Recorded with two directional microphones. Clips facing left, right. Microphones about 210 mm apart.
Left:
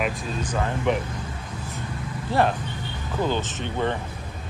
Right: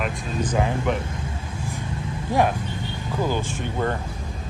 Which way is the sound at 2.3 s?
15° right (ahead or behind).